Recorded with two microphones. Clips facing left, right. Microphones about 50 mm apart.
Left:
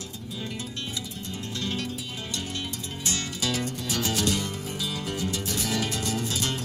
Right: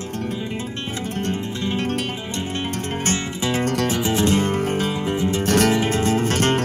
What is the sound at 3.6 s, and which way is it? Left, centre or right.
Music, right.